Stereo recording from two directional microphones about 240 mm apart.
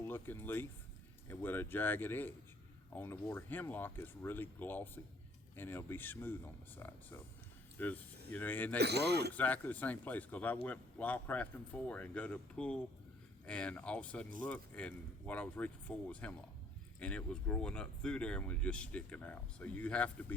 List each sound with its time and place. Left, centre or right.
0.0 s speech: centre
8.8 s a man's voice: right
9.3 s speech: centre